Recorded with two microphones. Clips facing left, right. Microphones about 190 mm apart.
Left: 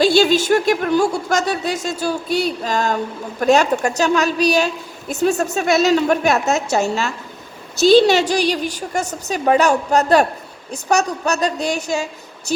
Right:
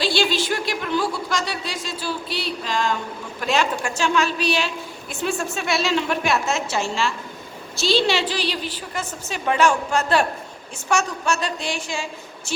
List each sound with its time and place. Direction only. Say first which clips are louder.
0.0 s a woman's voice: left 8 dB; 45° left (ahead or behind)